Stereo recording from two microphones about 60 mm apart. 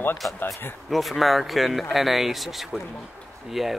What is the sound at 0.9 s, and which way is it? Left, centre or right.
Speech, centre.